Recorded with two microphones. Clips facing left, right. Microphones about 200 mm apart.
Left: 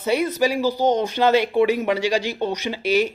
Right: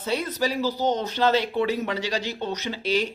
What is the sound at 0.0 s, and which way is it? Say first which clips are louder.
Speech: left 6 dB; 10° left (ahead or behind).